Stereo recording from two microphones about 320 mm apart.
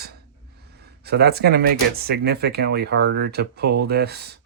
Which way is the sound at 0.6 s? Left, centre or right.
Right.